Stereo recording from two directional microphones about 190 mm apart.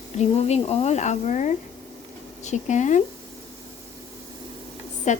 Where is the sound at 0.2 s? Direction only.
35° left (ahead or behind).